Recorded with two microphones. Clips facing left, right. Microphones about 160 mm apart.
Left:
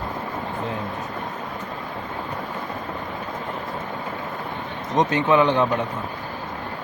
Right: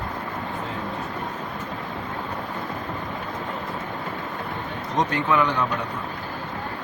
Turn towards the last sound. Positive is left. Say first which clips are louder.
# left 4 dB
turn(degrees=20)  # may be behind; listen again after turning